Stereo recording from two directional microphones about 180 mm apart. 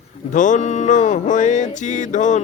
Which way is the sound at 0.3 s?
45° left (ahead or behind).